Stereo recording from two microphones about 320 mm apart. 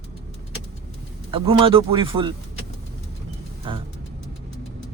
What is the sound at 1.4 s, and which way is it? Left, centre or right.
Speech, centre.